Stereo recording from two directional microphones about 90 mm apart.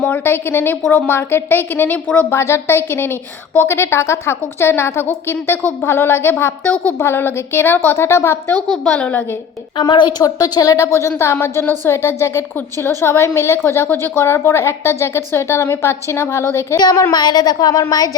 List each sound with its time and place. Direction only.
0.0 s a woman's voice: 20° left (ahead or behind)
2.3 s a woman's voice: 30° left (ahead or behind)
8.7 s a woman's voice: 10° left (ahead or behind)
9.9 s a woman's voice: 55° left (ahead or behind); by 16.7 s 30° left (ahead or behind)
16.7 s a woman's voice: 45° left (ahead or behind)